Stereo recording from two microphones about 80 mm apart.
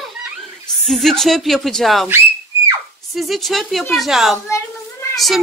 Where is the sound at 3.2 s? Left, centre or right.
Centre.